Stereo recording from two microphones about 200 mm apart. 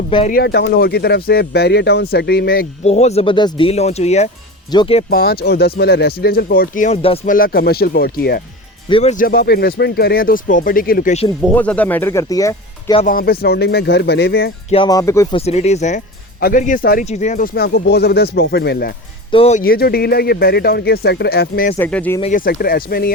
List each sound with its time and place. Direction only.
0.3 s speech: 50° left (ahead or behind)
2.8 s speech: 30° left (ahead or behind)
5.0 s speech: 50° left (ahead or behind); by 7.2 s 30° left (ahead or behind)
7.3 s speech: 45° left (ahead or behind)
8.9 s speech: 30° left (ahead or behind)
9.1 s speech: 50° left (ahead or behind)
11.5 s speech: 5° left (ahead or behind)
13.0 s speech: 45° left (ahead or behind)
14.7 s speech: 20° left (ahead or behind)
15.4 s speech: 30° left (ahead or behind); by 18.9 s 55° left (ahead or behind)
19.3 s speech: 30° left (ahead or behind)
19.6 s speech: 50° left (ahead or behind)
21.8 s speech: 5° left (ahead or behind)
22.2 s speech: 40° left (ahead or behind)